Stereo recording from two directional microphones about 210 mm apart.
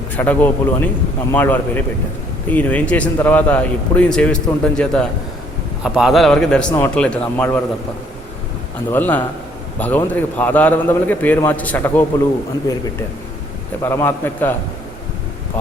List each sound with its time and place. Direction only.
0.2 s a man's voice: 10° left (ahead or behind)
8.9 s speech: 10° left (ahead or behind)
13.8 s speech: 10° left (ahead or behind)